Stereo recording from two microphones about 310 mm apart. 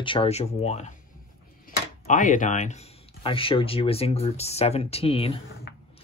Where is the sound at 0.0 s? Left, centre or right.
Centre.